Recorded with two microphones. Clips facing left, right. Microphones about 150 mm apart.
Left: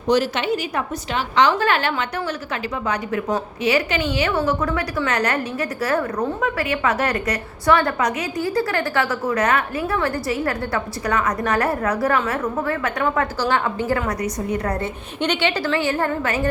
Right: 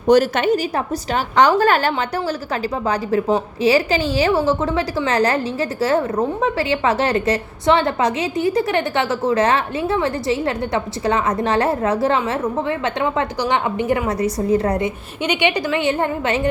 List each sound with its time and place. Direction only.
0.1 s a woman's voice: 50° right (ahead or behind); by 14.8 s 25° right (ahead or behind)
14.8 s a woman's voice: 15° right (ahead or behind)